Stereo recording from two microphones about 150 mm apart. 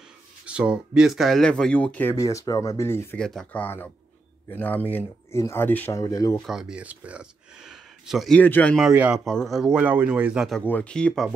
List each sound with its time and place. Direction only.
0.5 s speech: 5° right (ahead or behind); by 2.1 s 10° left (ahead or behind)
2.1 s speech: 20° left (ahead or behind)
3.2 s speech: 5° left (ahead or behind); by 6.4 s 25° left (ahead or behind)
6.4 s speech: 5° right (ahead or behind)
8.4 s speech: 10° left (ahead or behind)
8.9 s a man's voice: 10° right (ahead or behind)
9.2 s speech: centre (ahead or behind)
10.6 s speech: 10° left (ahead or behind)